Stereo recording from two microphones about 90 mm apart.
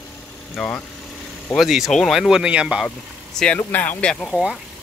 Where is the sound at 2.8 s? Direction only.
10° left (ahead or behind).